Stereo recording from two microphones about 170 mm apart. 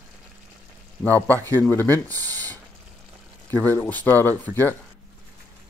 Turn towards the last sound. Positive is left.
turn(degrees=10)  # may be behind; listen again after turning